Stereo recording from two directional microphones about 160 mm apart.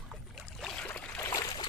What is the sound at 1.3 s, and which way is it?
Boat, 25° left (ahead or behind).